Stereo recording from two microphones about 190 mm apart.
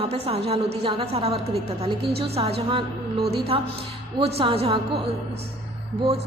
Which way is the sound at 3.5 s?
30° right (ahead or behind).